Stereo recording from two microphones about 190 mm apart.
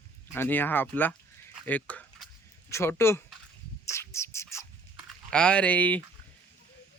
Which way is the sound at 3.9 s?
15° left (ahead or behind).